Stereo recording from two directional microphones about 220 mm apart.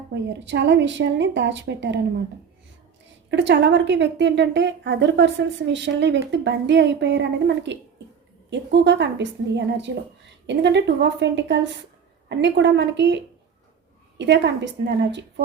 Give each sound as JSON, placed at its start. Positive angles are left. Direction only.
{"t": 0.1, "sound": "a woman's voice", "side_deg": -55}
{"t": 3.2, "sound": "a woman's voice", "side_deg": -55}